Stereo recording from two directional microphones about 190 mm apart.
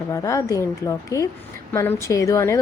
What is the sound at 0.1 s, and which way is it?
A woman's voice, 15° left (ahead or behind).